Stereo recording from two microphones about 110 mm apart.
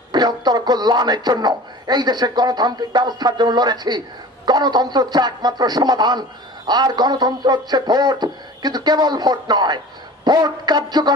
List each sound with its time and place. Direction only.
0.1 s speech: 40° right (ahead or behind)